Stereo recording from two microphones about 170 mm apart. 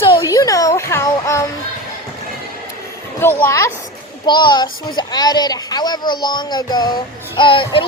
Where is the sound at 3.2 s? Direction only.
15° left (ahead or behind).